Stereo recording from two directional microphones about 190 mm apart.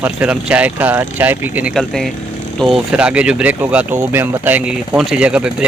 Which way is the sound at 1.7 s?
Centre (ahead or behind).